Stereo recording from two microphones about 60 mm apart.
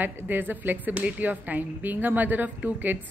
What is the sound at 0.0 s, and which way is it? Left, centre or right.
A woman's voice, right.